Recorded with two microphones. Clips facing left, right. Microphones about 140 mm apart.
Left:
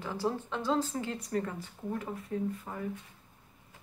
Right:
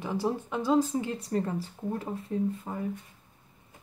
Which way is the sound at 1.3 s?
30° right (ahead or behind).